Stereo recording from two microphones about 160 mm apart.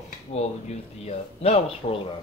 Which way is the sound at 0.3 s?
40° left (ahead or behind).